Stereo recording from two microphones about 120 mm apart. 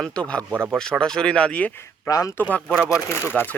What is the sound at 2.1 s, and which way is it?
Speech, 30° left (ahead or behind).